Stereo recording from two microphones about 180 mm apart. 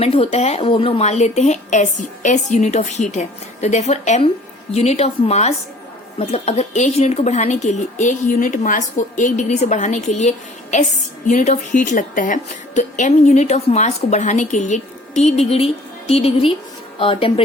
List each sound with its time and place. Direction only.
0.0 s a woman's voice: 35° left (ahead or behind)